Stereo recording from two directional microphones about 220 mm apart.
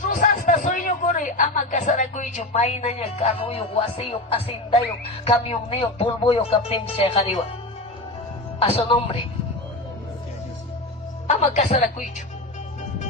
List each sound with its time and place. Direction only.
0.0 s a sound: 35° left (ahead or behind)
5.2 s speech: 25° left (ahead or behind)
8.5 s speech: 25° left (ahead or behind)
11.3 s a woman's voice: 30° left (ahead or behind)